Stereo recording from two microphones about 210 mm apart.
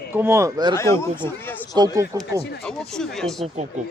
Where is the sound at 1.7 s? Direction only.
15° right (ahead or behind).